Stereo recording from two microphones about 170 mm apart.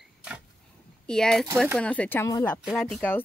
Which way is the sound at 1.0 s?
5° left (ahead or behind).